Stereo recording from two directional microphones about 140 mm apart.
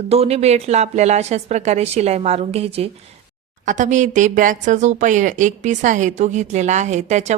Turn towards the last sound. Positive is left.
turn(degrees=-55)  # may be behind; listen again after turning